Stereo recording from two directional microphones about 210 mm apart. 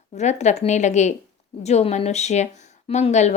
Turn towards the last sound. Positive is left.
turn(degrees=35)  # may be behind; listen again after turning